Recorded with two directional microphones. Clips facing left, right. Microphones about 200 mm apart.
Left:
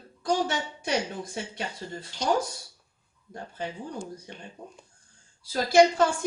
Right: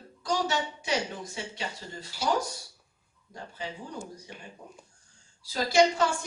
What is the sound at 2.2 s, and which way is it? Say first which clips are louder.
Speech: left 2 dB; 5° right (ahead or behind).